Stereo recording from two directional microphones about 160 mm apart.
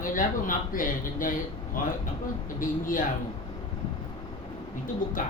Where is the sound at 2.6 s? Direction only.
55° left (ahead or behind).